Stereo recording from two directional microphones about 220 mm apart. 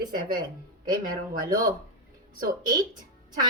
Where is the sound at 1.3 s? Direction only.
40° right (ahead or behind).